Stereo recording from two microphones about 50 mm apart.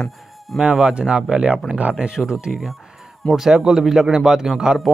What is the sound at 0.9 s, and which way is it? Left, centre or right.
A man's voice, right.